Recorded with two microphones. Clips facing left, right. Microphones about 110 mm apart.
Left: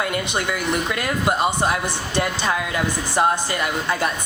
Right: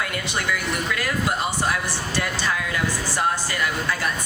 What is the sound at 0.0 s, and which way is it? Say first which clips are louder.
Speech: left 4 dB; 20° left (ahead or behind).